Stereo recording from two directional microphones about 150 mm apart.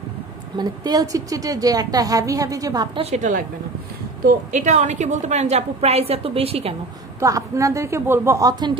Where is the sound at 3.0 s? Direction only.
50° right (ahead or behind).